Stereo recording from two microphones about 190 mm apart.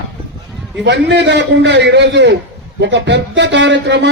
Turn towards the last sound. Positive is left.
turn(degrees=-70)  # may be behind; listen again after turning